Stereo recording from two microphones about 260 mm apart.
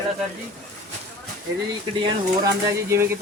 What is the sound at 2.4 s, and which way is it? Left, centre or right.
Speech, centre.